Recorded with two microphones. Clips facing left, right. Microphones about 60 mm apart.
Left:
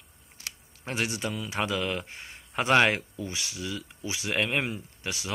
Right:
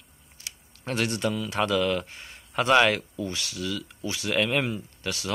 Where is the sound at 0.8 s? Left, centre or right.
Centre.